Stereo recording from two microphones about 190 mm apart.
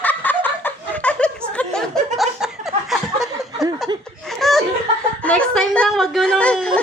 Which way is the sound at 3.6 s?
20° right (ahead or behind).